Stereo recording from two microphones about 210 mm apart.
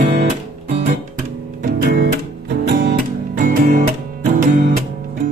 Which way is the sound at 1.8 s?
50° right (ahead or behind).